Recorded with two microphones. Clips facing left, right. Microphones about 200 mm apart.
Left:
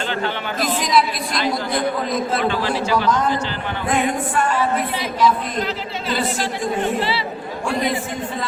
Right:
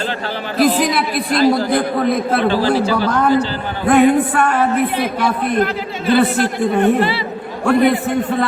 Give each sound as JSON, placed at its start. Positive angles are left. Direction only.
{"t": 0.8, "sound": "a sound", "side_deg": -60}
{"t": 1.7, "sound": "a man's voice", "side_deg": -60}
{"t": 2.5, "sound": "speech", "side_deg": -35}
{"t": 3.1, "sound": "a man's voice", "side_deg": -60}